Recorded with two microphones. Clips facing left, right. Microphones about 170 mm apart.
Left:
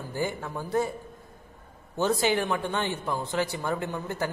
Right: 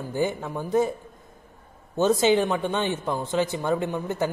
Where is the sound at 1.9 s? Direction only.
20° right (ahead or behind).